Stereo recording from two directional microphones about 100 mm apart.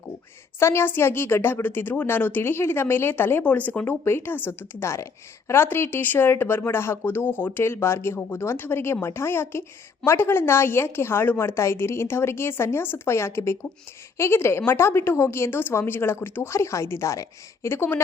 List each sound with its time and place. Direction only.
0.6 s speech: 25° left (ahead or behind)